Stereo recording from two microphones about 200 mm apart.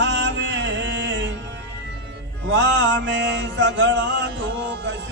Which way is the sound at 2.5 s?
65° right (ahead or behind).